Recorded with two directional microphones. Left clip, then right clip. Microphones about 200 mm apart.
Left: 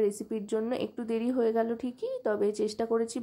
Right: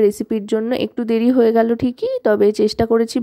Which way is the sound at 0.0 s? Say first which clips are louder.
Right 13 dB; 40° right (ahead or behind).